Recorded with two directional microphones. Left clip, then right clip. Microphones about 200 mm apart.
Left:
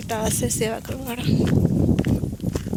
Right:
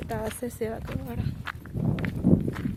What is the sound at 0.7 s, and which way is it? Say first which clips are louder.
Speech: left 7 dB; 25° left (ahead or behind).